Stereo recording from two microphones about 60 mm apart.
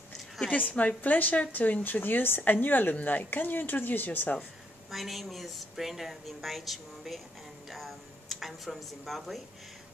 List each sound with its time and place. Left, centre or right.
0.5 s a woman's voice: left
4.9 s speech: centre